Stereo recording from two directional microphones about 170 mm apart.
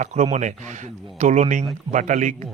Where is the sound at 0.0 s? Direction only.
45° right (ahead or behind).